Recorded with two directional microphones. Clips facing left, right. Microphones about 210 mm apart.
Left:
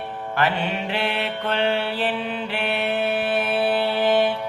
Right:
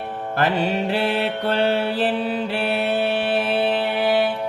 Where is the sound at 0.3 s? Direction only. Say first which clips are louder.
Right 3 dB; 40° right (ahead or behind).